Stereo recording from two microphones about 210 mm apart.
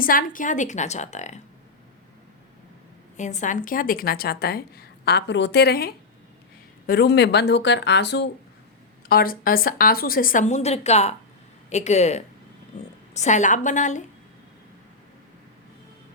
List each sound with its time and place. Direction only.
0.0 s a woman's voice: 40° left (ahead or behind)
3.2 s a woman's voice: 35° left (ahead or behind)